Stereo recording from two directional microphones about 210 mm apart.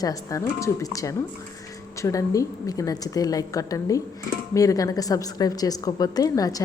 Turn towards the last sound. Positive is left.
turn(degrees=15)  # may be behind; listen again after turning